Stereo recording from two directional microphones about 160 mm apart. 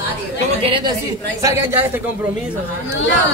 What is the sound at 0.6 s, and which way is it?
Speech, 35° right (ahead or behind).